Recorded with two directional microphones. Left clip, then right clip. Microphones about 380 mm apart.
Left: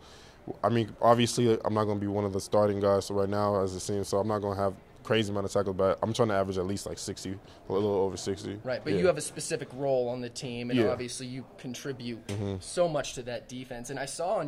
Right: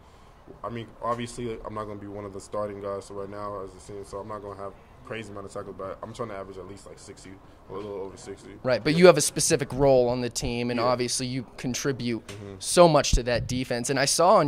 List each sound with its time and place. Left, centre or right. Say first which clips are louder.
0.6 s speech: left 8 dB; left
8.6 s speech: right 9 dB; right
13.3 s speech: right 11 dB; right